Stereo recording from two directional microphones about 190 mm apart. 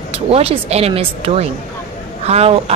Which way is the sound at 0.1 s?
30° right (ahead or behind).